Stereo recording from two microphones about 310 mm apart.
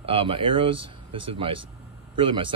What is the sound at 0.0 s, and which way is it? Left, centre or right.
Speech, centre.